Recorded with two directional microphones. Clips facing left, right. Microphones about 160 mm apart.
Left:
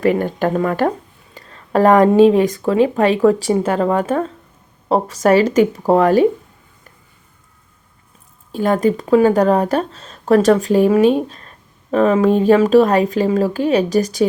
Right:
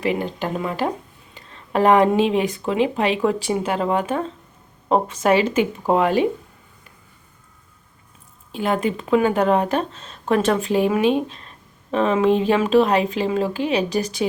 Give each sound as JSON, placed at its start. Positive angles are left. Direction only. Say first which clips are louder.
{"t": 0.0, "sound": "speech", "louder": "left 7 dB", "side_deg": 50}
{"t": 8.5, "sound": "speech", "louder": "left 6 dB", "side_deg": 40}